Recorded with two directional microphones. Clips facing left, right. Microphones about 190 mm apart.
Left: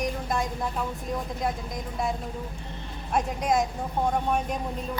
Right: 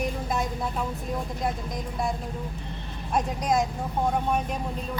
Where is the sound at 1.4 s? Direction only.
Centre (ahead or behind).